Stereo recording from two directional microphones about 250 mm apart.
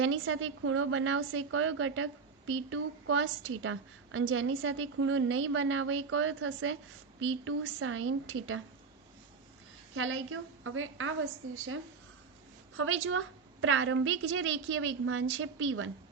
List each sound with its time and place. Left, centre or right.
0.0 s a woman's voice: right
9.9 s a woman's voice: right